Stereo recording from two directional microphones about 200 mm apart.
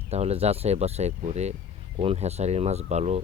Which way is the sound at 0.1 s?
30° right (ahead or behind).